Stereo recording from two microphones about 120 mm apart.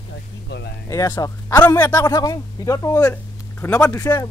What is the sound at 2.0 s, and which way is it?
Speech, 30° left (ahead or behind).